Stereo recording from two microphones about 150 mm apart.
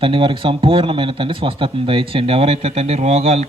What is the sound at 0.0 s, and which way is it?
Speech, 35° right (ahead or behind).